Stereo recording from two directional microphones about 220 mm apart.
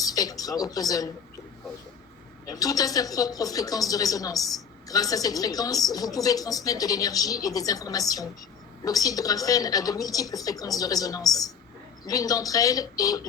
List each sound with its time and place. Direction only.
0.0 s a woman's voice: 15° left (ahead or behind)
2.5 s a woman's voice: 15° left (ahead or behind)